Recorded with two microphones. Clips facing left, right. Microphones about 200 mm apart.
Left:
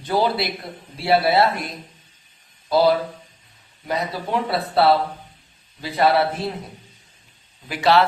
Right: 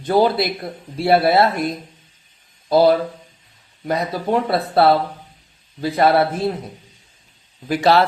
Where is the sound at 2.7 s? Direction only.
50° right (ahead or behind).